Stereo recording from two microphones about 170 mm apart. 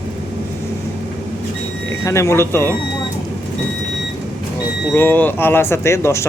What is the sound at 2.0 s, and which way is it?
Speech, 15° left (ahead or behind).